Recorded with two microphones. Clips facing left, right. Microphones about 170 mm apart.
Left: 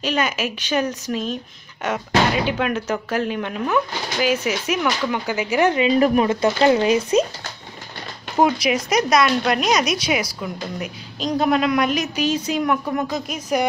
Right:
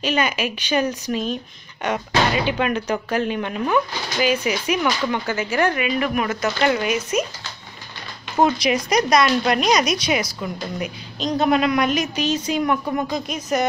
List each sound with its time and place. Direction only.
0.0 s speech: centre (ahead or behind)
5.1 s speech: 15° left (ahead or behind)
5.9 s speech: 35° left (ahead or behind)
8.4 s speech: 10° left (ahead or behind)